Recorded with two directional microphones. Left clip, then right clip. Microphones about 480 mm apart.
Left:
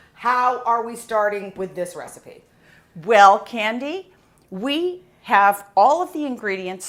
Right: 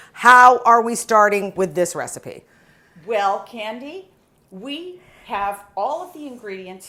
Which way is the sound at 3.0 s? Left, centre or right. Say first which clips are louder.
Left 8 dB; left.